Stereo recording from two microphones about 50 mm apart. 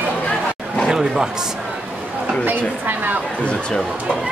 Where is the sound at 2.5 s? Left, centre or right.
Right.